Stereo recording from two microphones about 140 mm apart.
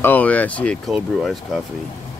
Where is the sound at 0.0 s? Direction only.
10° left (ahead or behind).